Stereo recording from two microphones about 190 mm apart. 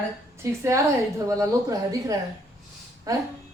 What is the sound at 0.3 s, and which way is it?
A woman's voice, 15° right (ahead or behind).